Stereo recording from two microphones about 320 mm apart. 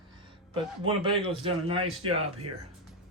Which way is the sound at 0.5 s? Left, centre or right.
Centre.